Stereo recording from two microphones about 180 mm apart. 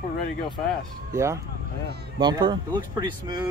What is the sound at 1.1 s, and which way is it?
Speech, 15° right (ahead or behind).